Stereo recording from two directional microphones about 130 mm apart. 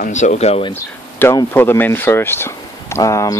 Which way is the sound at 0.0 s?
65° left (ahead or behind).